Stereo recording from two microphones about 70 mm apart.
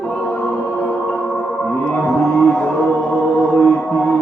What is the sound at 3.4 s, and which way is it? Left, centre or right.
Music, centre.